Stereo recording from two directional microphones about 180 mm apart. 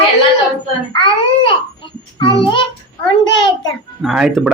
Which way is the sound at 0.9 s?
30° left (ahead or behind).